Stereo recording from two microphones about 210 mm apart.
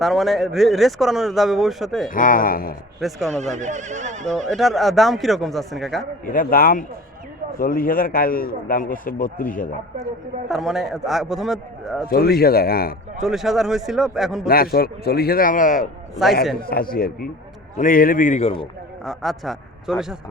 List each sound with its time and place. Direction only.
0.0 s speech: centre (ahead or behind)
2.0 s a man's voice: 40° left (ahead or behind)
3.0 s speech: centre (ahead or behind)
3.5 s speech: 35° right (ahead or behind)
4.5 s speech: centre (ahead or behind)
6.2 s a man's voice: 40° left (ahead or behind)
10.5 s speech: centre (ahead or behind)
12.0 s a man's voice: 45° left (ahead or behind)
13.1 s speech: centre (ahead or behind)
14.4 s a man's voice: 45° left (ahead or behind)
16.2 s speech: centre (ahead or behind)
16.6 s a man's voice: 45° left (ahead or behind); by 18.7 s 30° left (ahead or behind)
19.0 s speech: centre (ahead or behind)